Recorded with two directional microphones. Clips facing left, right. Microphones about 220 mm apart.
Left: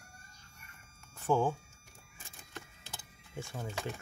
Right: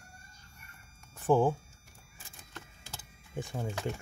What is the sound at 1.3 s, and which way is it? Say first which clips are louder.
Speech: right 4 dB; 30° right (ahead or behind).